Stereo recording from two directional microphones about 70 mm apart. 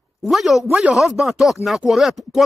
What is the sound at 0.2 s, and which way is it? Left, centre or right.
Speech, centre.